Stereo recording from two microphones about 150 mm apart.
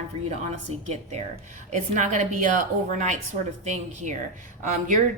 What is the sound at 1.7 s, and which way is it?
A woman's voice, 55° right (ahead or behind).